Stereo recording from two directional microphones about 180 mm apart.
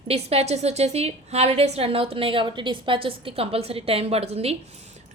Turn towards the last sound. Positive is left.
turn(degrees=-35)  # may be behind; listen again after turning